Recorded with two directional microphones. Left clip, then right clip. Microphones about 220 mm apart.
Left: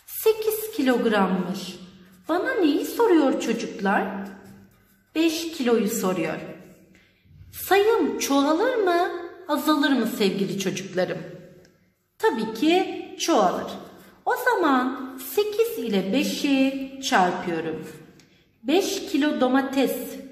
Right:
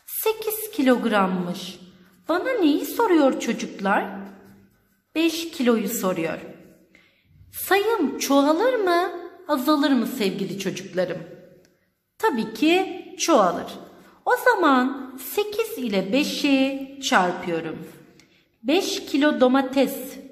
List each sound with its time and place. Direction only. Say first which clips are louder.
0.2 s a woman's voice: left 3 dB; 30° right (ahead or behind)
5.1 s a woman's voice: even; 30° right (ahead or behind)
7.5 s a woman's voice: left 1 dB; 30° right (ahead or behind)
12.2 s a woman's voice: right 1 dB; 30° right (ahead or behind)
18.7 s a woman's voice: even; 30° right (ahead or behind)